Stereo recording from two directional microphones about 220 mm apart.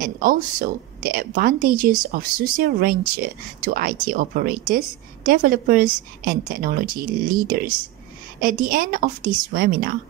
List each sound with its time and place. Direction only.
0.0 s speech: 40° right (ahead or behind)